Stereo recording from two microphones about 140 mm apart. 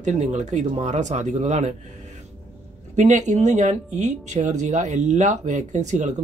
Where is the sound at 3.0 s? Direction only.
60° right (ahead or behind).